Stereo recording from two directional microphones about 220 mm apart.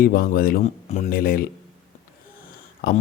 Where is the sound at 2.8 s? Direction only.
45° left (ahead or behind).